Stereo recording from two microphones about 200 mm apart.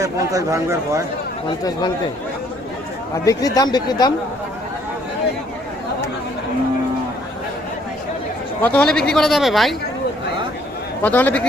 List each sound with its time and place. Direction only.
0.0 s speech: 15° right (ahead or behind)
3.2 s speech: 20° left (ahead or behind)
8.6 s speech: 5° left (ahead or behind)
11.0 s a man's voice: 10° left (ahead or behind)